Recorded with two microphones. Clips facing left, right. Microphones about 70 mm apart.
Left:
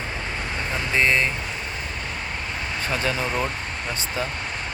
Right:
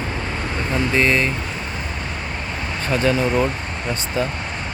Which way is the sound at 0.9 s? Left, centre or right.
Centre.